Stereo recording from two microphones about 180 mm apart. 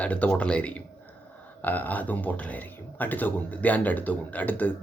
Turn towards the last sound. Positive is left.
turn(degrees=10)  # may be behind; listen again after turning